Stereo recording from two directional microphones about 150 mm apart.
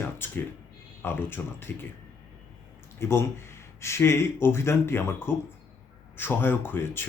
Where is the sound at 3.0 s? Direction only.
15° left (ahead or behind).